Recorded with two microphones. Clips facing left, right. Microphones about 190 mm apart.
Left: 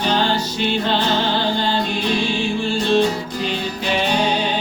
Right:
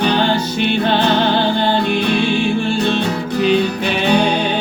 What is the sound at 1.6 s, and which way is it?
Music, 60° right (ahead or behind).